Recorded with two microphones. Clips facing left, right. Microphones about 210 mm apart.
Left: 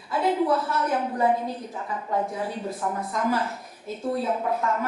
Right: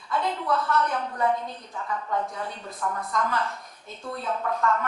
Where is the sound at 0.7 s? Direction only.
10° left (ahead or behind).